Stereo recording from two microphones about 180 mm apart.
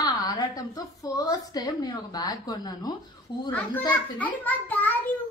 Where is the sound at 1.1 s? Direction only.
20° left (ahead or behind).